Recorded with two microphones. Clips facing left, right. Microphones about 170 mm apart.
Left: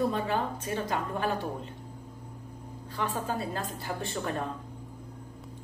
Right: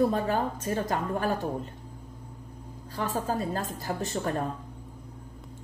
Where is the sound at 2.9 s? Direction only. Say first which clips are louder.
Right 2 dB; 40° right (ahead or behind).